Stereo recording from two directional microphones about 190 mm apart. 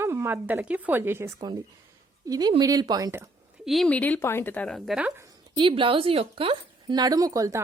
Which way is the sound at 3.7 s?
5° left (ahead or behind).